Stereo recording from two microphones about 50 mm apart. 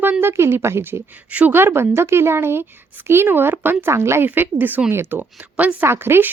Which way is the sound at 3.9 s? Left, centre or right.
Right.